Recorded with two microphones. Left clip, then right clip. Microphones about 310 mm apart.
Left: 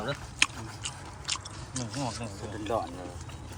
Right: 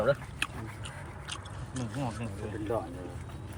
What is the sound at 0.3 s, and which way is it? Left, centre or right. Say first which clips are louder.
Chewing: left 8 dB; centre.